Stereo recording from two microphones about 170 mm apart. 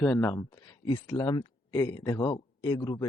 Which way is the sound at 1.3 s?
30° left (ahead or behind).